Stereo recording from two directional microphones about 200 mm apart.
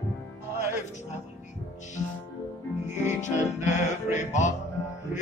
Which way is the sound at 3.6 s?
35° left (ahead or behind).